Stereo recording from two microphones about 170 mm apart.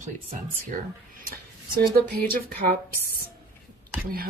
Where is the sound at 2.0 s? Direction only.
60° right (ahead or behind).